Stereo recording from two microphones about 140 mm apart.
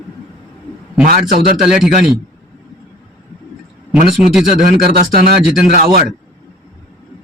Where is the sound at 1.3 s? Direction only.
90° right.